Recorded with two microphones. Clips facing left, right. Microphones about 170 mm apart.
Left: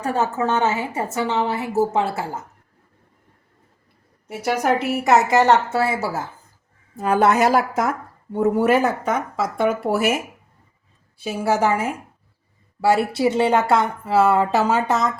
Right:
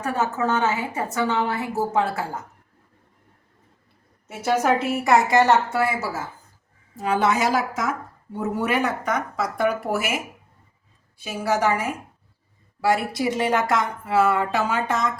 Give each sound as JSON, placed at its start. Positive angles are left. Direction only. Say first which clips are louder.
{"t": 0.0, "sound": "a woman's voice", "louder": "left 2 dB", "side_deg": 30}
{"t": 4.4, "sound": "a woman's voice", "louder": "even", "side_deg": 15}
{"t": 7.0, "sound": "a woman's voice", "louder": "left 4 dB", "side_deg": 55}
{"t": 8.4, "sound": "speech", "louder": "left 6 dB", "side_deg": 45}
{"t": 9.0, "sound": "a woman's voice", "louder": "left 3 dB", "side_deg": 25}
{"t": 11.2, "sound": "a woman's voice", "louder": "left 3 dB", "side_deg": 30}